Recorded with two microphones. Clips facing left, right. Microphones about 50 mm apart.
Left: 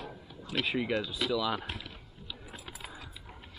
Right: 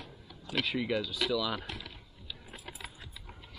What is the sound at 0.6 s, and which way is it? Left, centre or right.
Speech, centre.